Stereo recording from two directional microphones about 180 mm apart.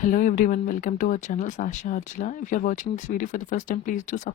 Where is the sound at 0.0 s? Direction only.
45° left (ahead or behind).